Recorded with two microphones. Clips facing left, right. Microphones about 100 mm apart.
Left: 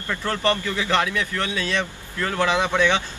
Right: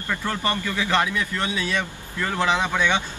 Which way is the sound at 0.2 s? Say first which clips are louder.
Left 6 dB; 10° right (ahead or behind).